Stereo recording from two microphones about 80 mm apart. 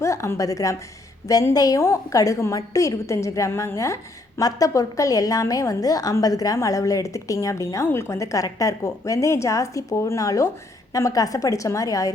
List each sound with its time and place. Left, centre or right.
0.0 s a woman's voice: left
7.9 s a woman's voice: left